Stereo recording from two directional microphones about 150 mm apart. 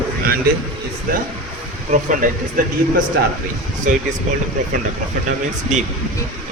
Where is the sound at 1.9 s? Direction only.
60° right (ahead or behind).